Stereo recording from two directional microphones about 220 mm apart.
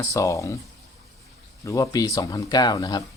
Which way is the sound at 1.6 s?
15° left (ahead or behind).